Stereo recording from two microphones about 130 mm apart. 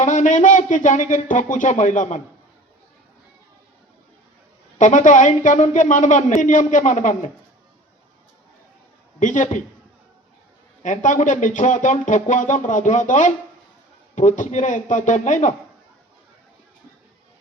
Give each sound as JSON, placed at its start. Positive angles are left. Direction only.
{"t": 0.0, "sound": "speech", "side_deg": 70}
{"t": 4.8, "sound": "speech", "side_deg": 75}
{"t": 9.2, "sound": "speech", "side_deg": 75}
{"t": 10.8, "sound": "speech", "side_deg": 75}